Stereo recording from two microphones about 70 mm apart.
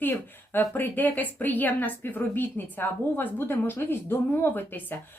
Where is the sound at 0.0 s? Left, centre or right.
Left.